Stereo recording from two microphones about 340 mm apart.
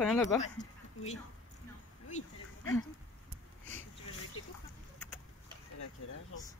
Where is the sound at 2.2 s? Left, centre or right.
Left.